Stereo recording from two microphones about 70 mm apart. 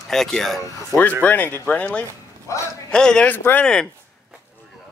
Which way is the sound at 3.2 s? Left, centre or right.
Left.